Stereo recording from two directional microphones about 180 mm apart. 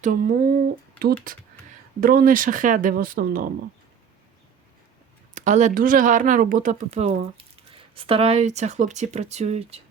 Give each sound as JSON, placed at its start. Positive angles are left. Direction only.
{"t": 0.0, "sound": "speech", "side_deg": -50}
{"t": 5.3, "sound": "speech", "side_deg": -40}